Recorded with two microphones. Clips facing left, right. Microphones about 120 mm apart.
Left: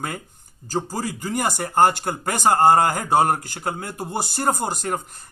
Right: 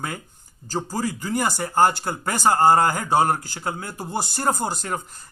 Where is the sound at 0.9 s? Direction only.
45° left (ahead or behind).